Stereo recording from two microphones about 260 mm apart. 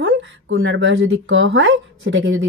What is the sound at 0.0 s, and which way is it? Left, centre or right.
Speech, right.